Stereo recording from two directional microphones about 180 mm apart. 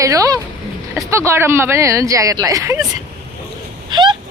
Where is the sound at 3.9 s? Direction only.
25° right (ahead or behind).